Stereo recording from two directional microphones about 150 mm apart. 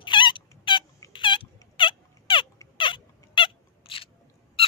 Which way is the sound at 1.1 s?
35° left (ahead or behind).